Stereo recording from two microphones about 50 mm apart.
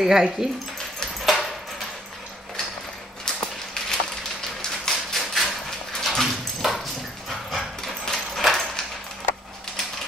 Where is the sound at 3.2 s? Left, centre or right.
Centre.